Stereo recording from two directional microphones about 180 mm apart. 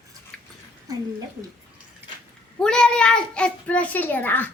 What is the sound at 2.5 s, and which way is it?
A child's voice, 5° left (ahead or behind).